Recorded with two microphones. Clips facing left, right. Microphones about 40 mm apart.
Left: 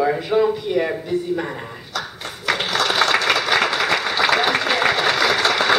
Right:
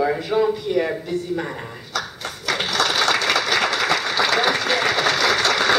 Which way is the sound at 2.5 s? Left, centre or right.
Left.